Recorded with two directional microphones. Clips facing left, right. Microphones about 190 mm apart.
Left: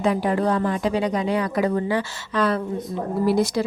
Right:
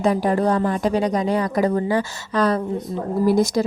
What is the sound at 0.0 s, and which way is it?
Speech, 40° right (ahead or behind).